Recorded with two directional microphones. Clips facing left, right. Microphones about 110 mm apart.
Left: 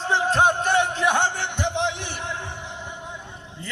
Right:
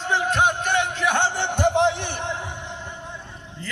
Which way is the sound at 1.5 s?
45° right (ahead or behind).